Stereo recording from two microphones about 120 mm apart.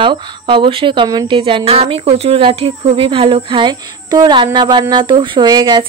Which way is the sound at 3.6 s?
35° right (ahead or behind).